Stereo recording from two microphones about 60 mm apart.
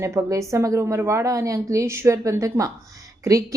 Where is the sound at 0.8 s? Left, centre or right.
Right.